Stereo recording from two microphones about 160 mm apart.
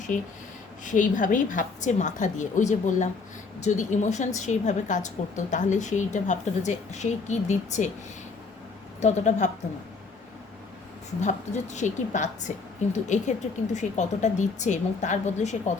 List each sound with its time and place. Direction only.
0.1 s a woman's voice: 50° left (ahead or behind)
9.0 s a woman's voice: 45° left (ahead or behind)
11.2 s a woman's voice: 50° left (ahead or behind)